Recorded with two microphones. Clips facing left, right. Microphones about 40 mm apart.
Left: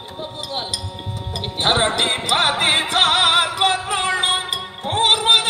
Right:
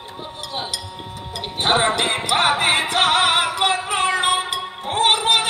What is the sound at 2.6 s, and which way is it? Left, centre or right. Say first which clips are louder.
Music: left 1 dB; left.